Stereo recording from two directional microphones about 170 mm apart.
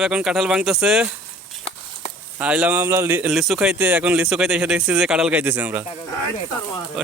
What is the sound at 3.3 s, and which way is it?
A man's voice, centre (ahead or behind).